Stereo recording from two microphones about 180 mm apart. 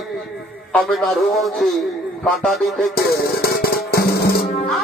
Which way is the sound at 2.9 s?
60° left (ahead or behind).